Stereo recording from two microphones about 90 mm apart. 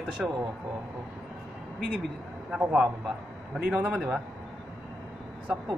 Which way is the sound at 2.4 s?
5° right (ahead or behind).